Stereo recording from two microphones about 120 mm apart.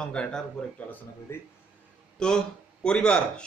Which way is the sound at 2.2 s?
5° left (ahead or behind).